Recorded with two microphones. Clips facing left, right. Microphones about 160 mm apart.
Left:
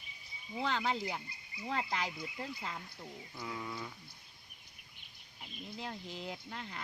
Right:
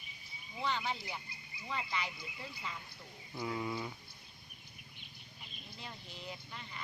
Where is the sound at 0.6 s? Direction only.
90° left.